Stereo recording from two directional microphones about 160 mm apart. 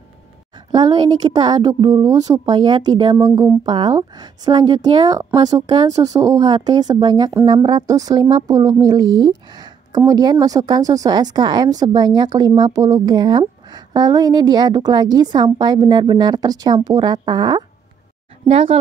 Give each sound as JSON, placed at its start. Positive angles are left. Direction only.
{"t": 0.7, "sound": "a woman's voice", "side_deg": -25}